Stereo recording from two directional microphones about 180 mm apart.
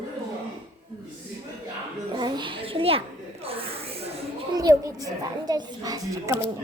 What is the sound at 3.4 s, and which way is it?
Snake, 30° right (ahead or behind).